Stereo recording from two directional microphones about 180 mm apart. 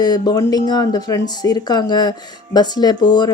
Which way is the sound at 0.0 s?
20° left (ahead or behind).